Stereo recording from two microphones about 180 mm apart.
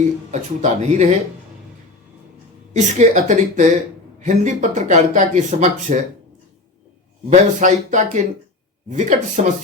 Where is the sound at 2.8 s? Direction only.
40° right (ahead or behind).